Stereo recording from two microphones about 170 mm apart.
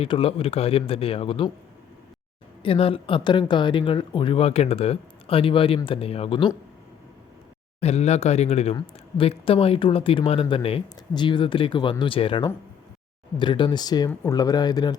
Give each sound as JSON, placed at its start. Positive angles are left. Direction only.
{"t": 0.0, "sound": "speech", "side_deg": 35}
{"t": 2.6, "sound": "speech", "side_deg": 35}
{"t": 7.8, "sound": "speech", "side_deg": 40}